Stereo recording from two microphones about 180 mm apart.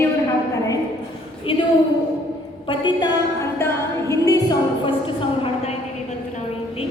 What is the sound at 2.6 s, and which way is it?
Speech, 25° left (ahead or behind).